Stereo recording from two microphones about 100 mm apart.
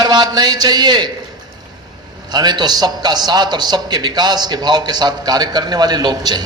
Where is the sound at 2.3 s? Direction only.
45° right (ahead or behind).